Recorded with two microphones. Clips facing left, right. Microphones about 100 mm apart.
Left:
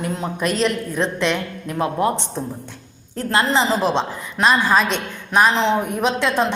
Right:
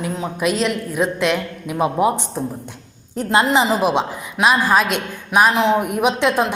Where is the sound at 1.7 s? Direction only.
15° right (ahead or behind).